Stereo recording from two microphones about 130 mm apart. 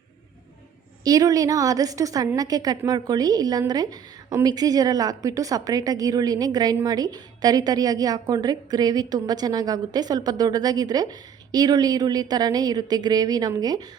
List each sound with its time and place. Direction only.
1.0 s a woman's voice: 30° right (ahead or behind)